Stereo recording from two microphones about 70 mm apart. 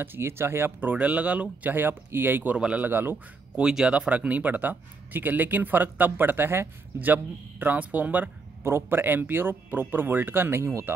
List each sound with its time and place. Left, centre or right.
0.0 s speech: right
2.9 s speech: right
3.5 s speech: centre; by 10.9 s right